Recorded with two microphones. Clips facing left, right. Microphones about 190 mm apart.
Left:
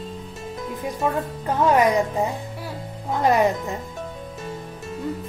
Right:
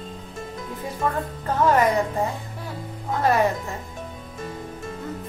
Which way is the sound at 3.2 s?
15° left (ahead or behind).